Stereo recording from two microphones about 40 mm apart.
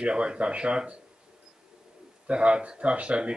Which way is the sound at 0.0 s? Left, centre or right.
Right.